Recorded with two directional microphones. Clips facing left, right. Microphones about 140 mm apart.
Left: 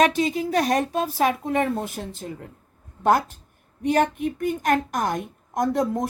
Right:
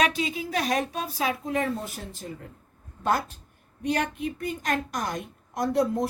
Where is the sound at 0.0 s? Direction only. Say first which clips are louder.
Left 6 dB; 45° left (ahead or behind); by 1.9 s 60° left (ahead or behind).